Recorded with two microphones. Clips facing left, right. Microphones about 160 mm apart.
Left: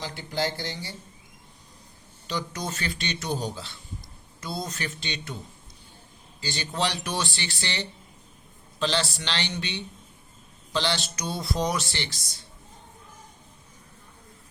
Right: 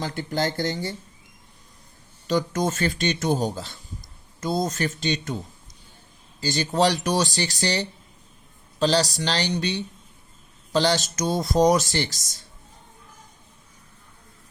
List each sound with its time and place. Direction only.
0.0 s speech: 50° right (ahead or behind)
2.2 s speech: 45° right (ahead or behind)
6.4 s speech: 40° right (ahead or behind)